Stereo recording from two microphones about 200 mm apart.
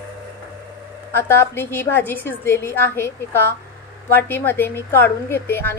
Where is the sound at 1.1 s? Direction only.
10° left (ahead or behind).